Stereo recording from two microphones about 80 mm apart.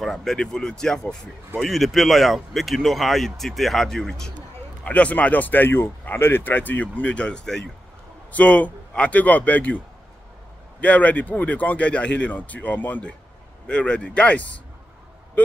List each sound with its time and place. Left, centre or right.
0.0 s speech: centre
4.8 s speech: centre
10.8 s speech: centre